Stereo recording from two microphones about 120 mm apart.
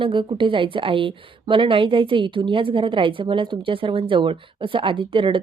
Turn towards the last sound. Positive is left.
turn(degrees=-45)  # may be behind; listen again after turning